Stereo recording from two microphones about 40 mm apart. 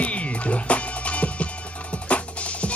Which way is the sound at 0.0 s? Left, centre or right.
Left.